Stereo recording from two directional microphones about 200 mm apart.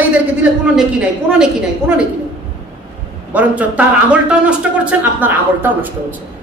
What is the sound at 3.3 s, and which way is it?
Speech, 5° right (ahead or behind).